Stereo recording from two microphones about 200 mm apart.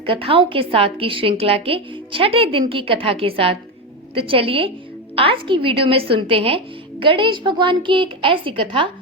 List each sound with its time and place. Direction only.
0.0 s a woman's voice: 25° right (ahead or behind)